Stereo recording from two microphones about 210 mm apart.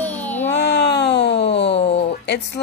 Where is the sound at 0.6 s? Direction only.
55° left (ahead or behind).